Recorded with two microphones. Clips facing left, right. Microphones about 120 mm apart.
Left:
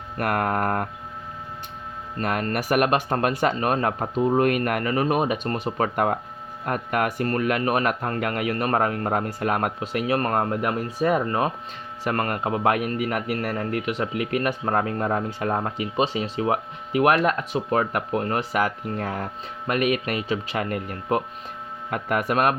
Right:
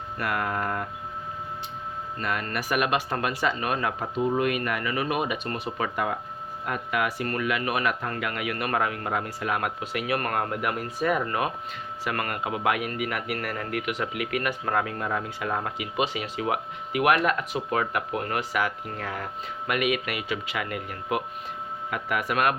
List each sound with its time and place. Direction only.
0.2 s speech: 50° left (ahead or behind)
2.1 s a man's voice: 50° left (ahead or behind)